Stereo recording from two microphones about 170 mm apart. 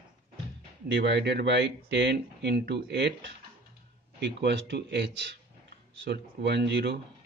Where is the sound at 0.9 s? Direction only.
90° right.